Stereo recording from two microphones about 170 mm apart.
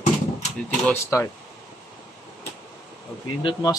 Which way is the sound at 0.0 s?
40° left (ahead or behind).